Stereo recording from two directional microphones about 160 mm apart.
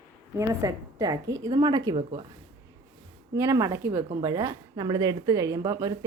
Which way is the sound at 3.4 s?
20° right (ahead or behind).